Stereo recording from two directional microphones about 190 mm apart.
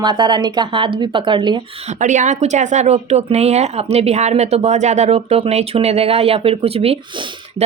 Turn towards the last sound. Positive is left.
turn(degrees=-30)  # may be behind; listen again after turning